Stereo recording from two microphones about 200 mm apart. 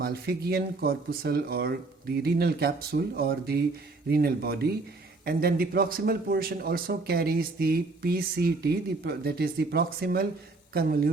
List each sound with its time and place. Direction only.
0.0 s speech: 50° right (ahead or behind)